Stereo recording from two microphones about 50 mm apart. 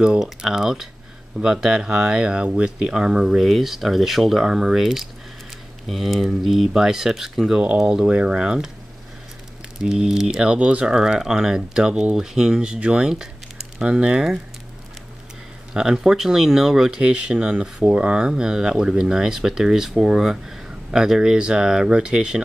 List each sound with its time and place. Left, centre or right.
0.4 s speech: centre
7.8 s speech: centre
9.8 s speech: centre
15.7 s speech: centre
17.0 s speech: centre